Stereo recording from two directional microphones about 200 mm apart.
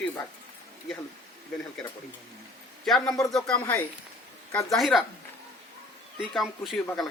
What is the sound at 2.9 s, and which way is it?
Speech, 5° left (ahead or behind).